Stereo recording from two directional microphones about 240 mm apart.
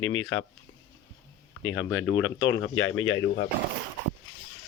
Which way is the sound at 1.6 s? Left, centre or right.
Left.